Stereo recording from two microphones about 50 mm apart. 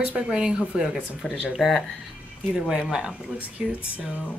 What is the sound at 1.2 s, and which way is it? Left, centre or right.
Speech, centre.